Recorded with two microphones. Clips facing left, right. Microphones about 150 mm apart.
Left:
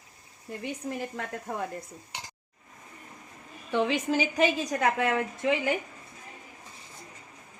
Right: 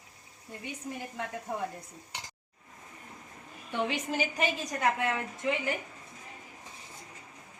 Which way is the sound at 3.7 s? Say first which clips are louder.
Left 6 dB; 90° left.